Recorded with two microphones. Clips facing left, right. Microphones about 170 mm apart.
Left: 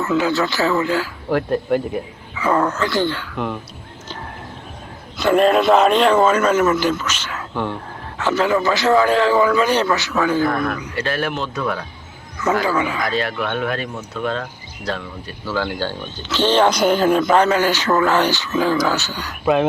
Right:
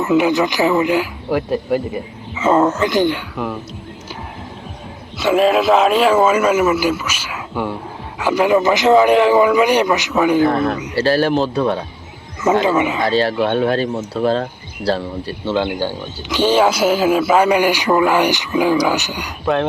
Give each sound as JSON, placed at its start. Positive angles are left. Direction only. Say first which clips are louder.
{"t": 0.0, "sound": "speech", "louder": "right 4 dB", "side_deg": -20}
{"t": 1.4, "sound": "speech", "louder": "even", "side_deg": -5}
{"t": 2.3, "sound": "speech", "louder": "right 4 dB", "side_deg": -20}
{"t": 3.3, "sound": "speech", "louder": "right 1 dB", "side_deg": -5}
{"t": 5.1, "sound": "speech", "louder": "right 1 dB", "side_deg": 0}
{"t": 12.4, "sound": "speech", "louder": "right 4 dB", "side_deg": -20}